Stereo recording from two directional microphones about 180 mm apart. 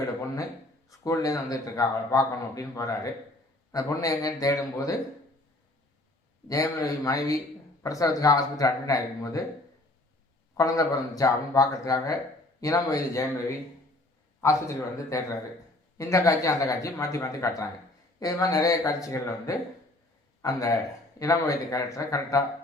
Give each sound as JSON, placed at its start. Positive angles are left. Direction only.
{"t": 0.9, "sound": "a man's voice", "side_deg": 20}
{"t": 6.5, "sound": "a man's voice", "side_deg": 20}
{"t": 10.6, "sound": "a man's voice", "side_deg": 20}
{"t": 14.4, "sound": "a man's voice", "side_deg": 15}